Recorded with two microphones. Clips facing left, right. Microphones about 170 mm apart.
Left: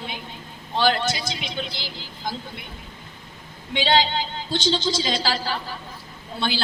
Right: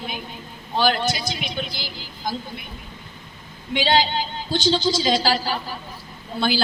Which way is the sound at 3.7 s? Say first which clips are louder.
Right 1 dB; 25° left (ahead or behind).